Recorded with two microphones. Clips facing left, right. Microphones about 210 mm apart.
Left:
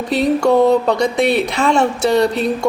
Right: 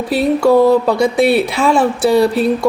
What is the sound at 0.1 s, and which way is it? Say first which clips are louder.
A woman's voice: right 2 dB; 5° right (ahead or behind).